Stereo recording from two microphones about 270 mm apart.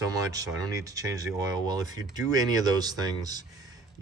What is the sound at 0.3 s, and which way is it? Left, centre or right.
A man's voice, centre.